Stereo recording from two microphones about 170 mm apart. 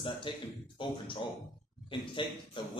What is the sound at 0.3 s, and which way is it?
A man's voice, 30° left (ahead or behind).